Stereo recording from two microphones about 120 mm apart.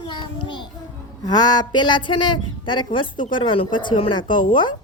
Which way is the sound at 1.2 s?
35° left (ahead or behind).